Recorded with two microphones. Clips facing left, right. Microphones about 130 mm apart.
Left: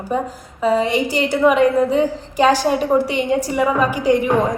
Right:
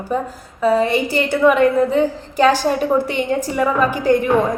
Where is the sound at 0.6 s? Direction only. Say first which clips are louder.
Right 1 dB; 20° left (ahead or behind).